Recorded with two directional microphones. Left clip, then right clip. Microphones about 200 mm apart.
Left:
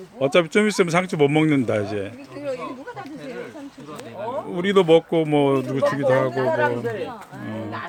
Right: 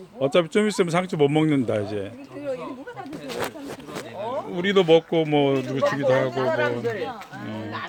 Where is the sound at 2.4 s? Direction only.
25° left (ahead or behind).